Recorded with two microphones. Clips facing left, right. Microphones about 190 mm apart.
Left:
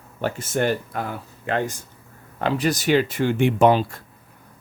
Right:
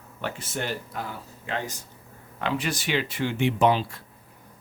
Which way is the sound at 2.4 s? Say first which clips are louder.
Left 6 dB; 40° left (ahead or behind).